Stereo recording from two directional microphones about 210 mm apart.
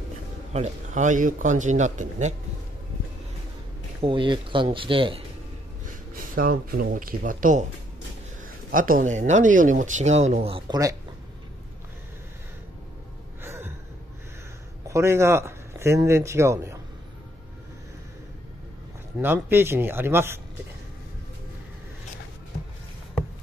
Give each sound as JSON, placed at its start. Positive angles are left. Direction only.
{"t": 0.5, "sound": "speech", "side_deg": -35}
{"t": 4.0, "sound": "speech", "side_deg": -25}
{"t": 6.1, "sound": "speech", "side_deg": -40}
{"t": 8.7, "sound": "speech", "side_deg": -40}
{"t": 13.4, "sound": "gasp", "side_deg": -10}
{"t": 14.9, "sound": "speech", "side_deg": -15}
{"t": 19.1, "sound": "speech", "side_deg": -10}